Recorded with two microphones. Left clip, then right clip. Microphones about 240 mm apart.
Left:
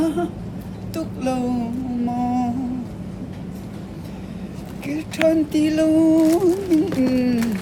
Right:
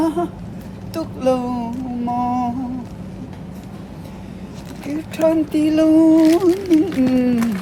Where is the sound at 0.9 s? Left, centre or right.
Right.